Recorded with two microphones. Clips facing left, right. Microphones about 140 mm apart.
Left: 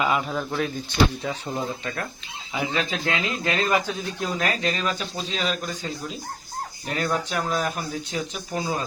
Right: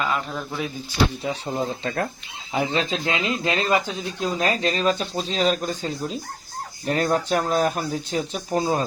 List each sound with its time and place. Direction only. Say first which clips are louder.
0.0 s speech: left 2 dB; 10° left (ahead or behind)
1.3 s speech: right 3 dB; 25° right (ahead or behind)